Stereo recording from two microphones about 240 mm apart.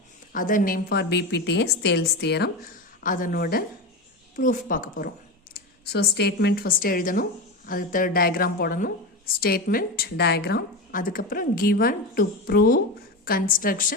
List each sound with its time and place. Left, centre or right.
0.3 s a woman's voice: left
3.0 s a woman's voice: left